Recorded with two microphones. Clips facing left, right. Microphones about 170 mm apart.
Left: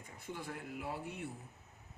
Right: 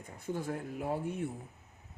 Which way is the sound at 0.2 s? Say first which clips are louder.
Right 8 dB; 45° right (ahead or behind).